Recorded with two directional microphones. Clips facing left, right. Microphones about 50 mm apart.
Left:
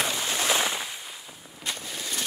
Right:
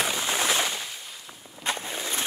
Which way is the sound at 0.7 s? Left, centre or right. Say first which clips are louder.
Left 2 dB; centre.